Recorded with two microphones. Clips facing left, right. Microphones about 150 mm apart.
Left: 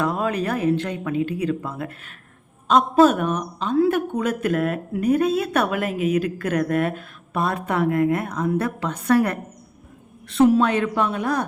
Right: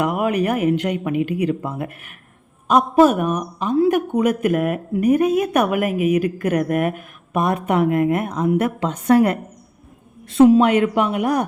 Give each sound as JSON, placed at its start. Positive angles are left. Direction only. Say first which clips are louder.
{"t": 0.0, "sound": "speech", "louder": "right 4 dB", "side_deg": -15}